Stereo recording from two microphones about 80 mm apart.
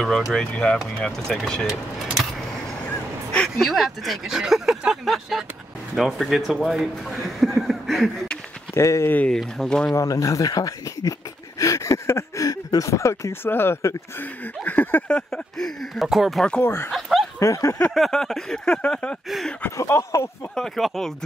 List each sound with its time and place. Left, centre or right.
0.0 s speech: centre
3.4 s speech: centre
8.7 s speech: left
9.3 s speech: centre
9.9 s speech: left; by 16.4 s centre
16.6 s speech: left
17.4 s a sound: left
17.9 s speech: centre
19.2 s speech: centre
19.8 s a sound: left
20.5 s speech: centre